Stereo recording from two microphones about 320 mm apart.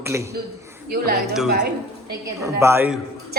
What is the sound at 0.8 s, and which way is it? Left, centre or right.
A woman's voice, right.